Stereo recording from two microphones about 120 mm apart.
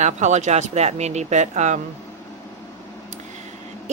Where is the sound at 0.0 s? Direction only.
75° right (ahead or behind).